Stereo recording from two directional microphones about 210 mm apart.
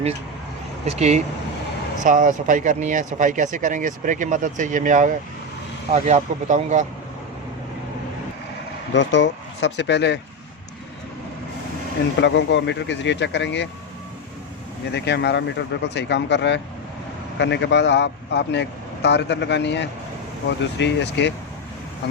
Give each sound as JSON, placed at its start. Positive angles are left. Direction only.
{"t": 0.9, "sound": "speech", "side_deg": -30}
{"t": 8.9, "sound": "speech", "side_deg": 55}
{"t": 12.2, "sound": "speech", "side_deg": 60}
{"t": 14.9, "sound": "speech", "side_deg": 55}